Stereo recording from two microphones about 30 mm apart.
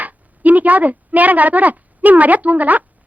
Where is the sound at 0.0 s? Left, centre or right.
Right.